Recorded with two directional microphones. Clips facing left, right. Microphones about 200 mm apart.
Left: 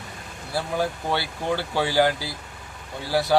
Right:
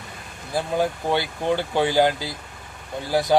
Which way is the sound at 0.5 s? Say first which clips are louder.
Right 3 dB; 15° right (ahead or behind).